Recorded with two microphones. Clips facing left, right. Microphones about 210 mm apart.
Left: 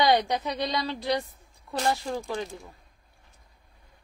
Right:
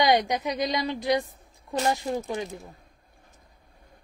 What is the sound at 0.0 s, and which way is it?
A woman's voice, 15° right (ahead or behind).